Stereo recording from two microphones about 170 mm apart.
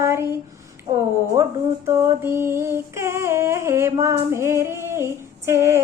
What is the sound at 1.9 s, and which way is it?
Female singing, 15° right (ahead or behind).